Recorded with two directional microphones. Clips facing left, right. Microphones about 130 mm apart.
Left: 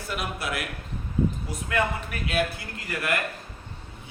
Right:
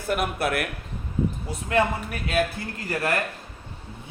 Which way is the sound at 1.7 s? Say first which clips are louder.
Right 4 dB; 35° right (ahead or behind).